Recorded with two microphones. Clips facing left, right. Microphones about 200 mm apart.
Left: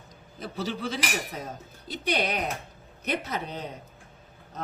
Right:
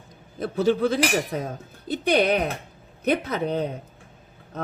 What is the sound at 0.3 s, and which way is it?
Speech, 55° right (ahead or behind).